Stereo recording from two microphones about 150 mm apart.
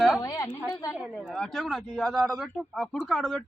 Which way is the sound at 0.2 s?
20° left (ahead or behind).